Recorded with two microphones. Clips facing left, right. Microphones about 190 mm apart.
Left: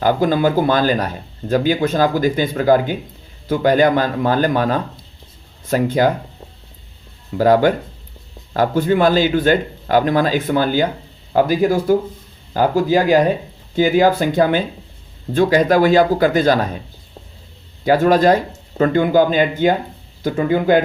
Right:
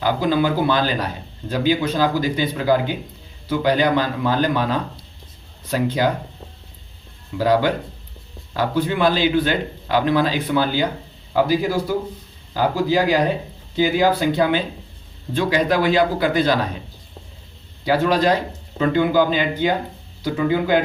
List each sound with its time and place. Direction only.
0.0 s speech: 50° left (ahead or behind)
7.3 s speech: 50° left (ahead or behind)
17.8 s speech: 50° left (ahead or behind)